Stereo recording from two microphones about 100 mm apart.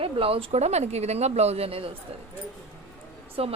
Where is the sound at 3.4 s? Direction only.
75° right (ahead or behind).